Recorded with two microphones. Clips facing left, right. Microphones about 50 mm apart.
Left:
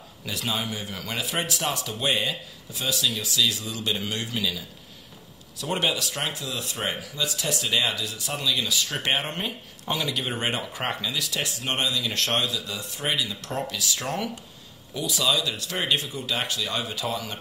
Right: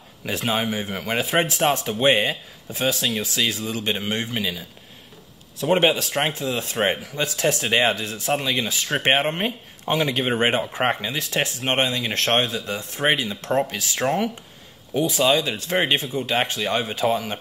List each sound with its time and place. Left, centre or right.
0.2 s speech: right